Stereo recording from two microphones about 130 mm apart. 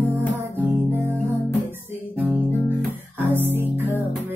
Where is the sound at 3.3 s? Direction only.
15° right (ahead or behind).